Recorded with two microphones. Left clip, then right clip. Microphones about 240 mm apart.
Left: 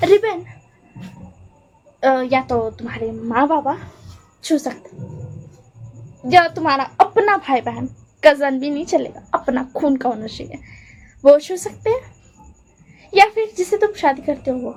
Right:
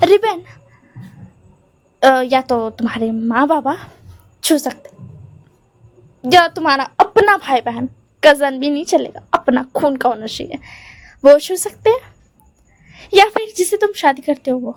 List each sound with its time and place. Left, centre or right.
0.0 s speech: right
2.0 s a woman's voice: right
6.2 s a woman's voice: right